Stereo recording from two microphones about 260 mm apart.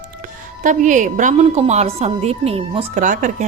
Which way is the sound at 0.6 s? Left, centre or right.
Right.